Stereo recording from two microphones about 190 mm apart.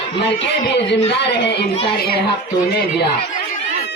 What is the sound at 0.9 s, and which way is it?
Speech, 65° left (ahead or behind).